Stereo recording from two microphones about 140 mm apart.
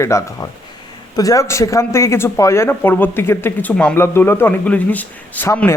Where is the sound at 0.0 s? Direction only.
20° left (ahead or behind).